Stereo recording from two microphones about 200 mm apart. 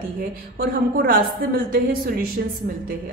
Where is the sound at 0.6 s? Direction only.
45° right (ahead or behind).